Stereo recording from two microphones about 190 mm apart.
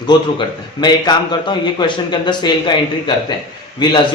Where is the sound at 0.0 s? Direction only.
25° left (ahead or behind).